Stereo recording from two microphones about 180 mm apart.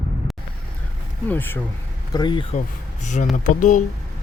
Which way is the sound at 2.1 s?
25° left (ahead or behind).